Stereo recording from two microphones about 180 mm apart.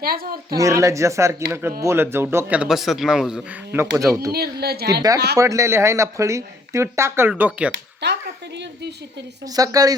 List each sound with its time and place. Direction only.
0.0 s a woman's voice: 55° right (ahead or behind)
0.5 s speech: 15° right (ahead or behind)
3.9 s speech: 15° right (ahead or behind)
4.3 s a woman's voice: 60° right (ahead or behind)
5.4 s speech: 15° right (ahead or behind)
7.7 s a sound: 75° right (ahead or behind)
9.6 s speech: 20° right (ahead or behind)